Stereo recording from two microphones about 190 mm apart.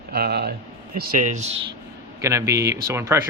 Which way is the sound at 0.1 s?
55° right (ahead or behind).